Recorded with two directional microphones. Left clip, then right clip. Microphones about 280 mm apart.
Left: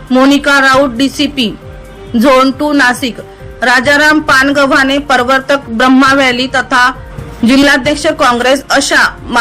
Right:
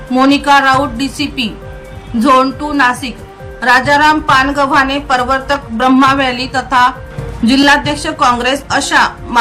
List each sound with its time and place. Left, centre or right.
0.1 s speech: centre